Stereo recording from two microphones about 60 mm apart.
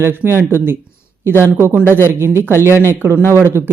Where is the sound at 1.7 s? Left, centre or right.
Right.